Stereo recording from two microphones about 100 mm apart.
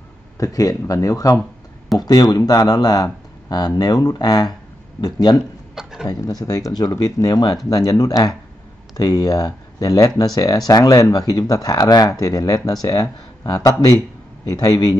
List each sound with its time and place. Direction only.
0.4 s speech: 35° left (ahead or behind)
5.8 s a sound: 5° right (ahead or behind)
6.0 s speech: 35° left (ahead or behind)